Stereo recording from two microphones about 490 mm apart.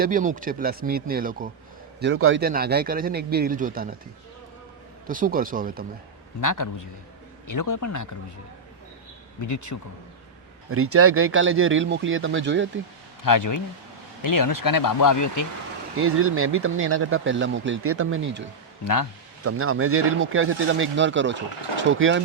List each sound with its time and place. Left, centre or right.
0.0 s a man's voice: centre
5.0 s a man's voice: centre
6.4 s speech: left
9.4 s speech: left
10.7 s speech: right
13.2 s speech: left
16.0 s speech: right
19.5 s speech: right